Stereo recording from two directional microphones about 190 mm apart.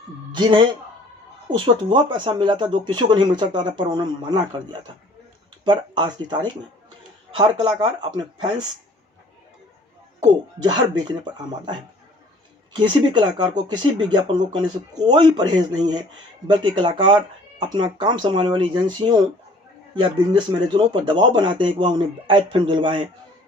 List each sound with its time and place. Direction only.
0.3 s speech: 25° right (ahead or behind)
10.2 s speech: 20° right (ahead or behind)